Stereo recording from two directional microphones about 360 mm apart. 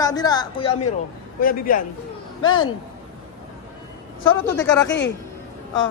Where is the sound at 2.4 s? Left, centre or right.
Left.